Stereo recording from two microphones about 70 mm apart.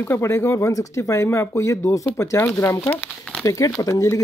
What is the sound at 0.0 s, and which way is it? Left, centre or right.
Speech, left.